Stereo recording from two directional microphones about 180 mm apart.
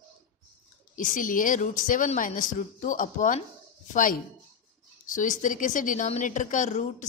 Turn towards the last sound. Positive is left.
turn(degrees=40)  # may be behind; listen again after turning